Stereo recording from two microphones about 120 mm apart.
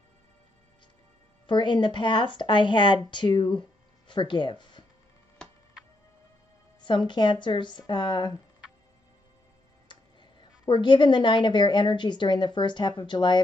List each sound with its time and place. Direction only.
1.5 s a woman's voice: 40° left (ahead or behind)
6.8 s a woman's voice: 40° left (ahead or behind)
9.9 s music: 40° left (ahead or behind)
10.6 s a woman's voice: 40° left (ahead or behind)